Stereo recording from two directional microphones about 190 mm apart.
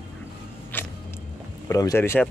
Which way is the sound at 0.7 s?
10° left (ahead or behind).